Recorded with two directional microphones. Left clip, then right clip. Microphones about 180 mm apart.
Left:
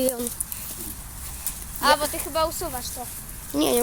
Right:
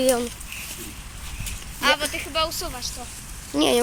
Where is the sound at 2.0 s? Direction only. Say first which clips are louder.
Even; 35° left (ahead or behind).